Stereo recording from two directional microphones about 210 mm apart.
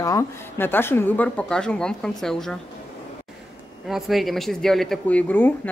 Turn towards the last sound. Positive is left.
turn(degrees=10)  # may be behind; listen again after turning